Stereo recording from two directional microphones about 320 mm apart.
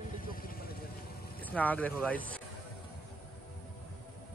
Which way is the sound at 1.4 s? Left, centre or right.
Centre.